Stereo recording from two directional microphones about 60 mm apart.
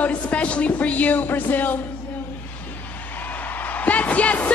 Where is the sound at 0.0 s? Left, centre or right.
Left.